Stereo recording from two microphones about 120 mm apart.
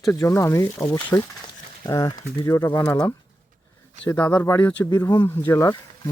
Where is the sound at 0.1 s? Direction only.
20° left (ahead or behind).